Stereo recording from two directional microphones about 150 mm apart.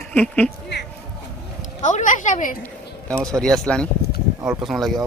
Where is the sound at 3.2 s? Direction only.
5° left (ahead or behind).